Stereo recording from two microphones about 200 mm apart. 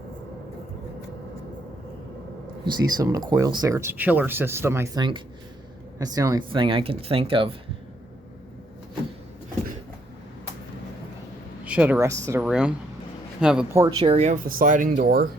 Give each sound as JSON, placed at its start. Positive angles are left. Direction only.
{"t": 2.6, "sound": "speech", "side_deg": -20}
{"t": 11.6, "sound": "speech", "side_deg": -5}
{"t": 12.5, "sound": "a man's voice", "side_deg": -5}
{"t": 13.8, "sound": "speech", "side_deg": -25}